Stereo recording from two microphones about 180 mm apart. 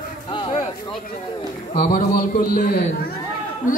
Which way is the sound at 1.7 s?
50° left (ahead or behind).